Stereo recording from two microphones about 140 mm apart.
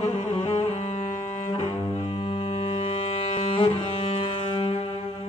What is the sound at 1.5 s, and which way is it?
Cello, 40° left (ahead or behind).